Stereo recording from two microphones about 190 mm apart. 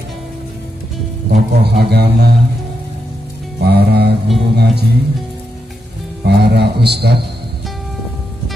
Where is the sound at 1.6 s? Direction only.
60° right (ahead or behind).